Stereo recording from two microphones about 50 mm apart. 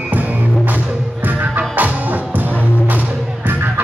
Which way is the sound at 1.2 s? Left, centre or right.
Right.